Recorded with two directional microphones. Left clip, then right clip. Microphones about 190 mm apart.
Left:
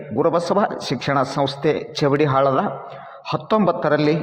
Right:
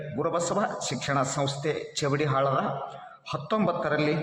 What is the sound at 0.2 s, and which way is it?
A man's voice, 25° left (ahead or behind).